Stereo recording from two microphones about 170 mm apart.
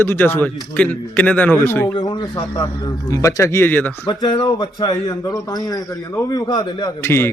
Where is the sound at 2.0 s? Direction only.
25° left (ahead or behind); by 3.9 s 10° left (ahead or behind).